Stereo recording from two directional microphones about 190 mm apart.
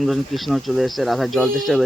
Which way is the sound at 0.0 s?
Centre (ahead or behind).